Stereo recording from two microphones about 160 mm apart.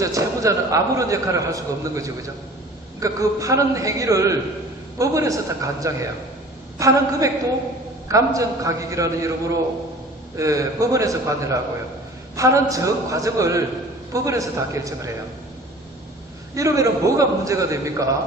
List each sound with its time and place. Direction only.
0.0 s a man's voice: 20° right (ahead or behind)
10.3 s a man's voice: 20° right (ahead or behind)
16.6 s a man's voice: 20° right (ahead or behind)